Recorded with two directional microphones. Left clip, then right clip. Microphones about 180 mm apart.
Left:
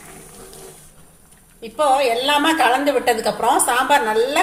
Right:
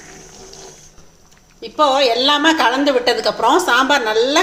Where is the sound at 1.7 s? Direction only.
25° right (ahead or behind).